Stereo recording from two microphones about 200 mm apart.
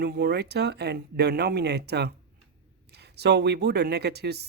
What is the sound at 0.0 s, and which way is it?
Speech, 55° right (ahead or behind).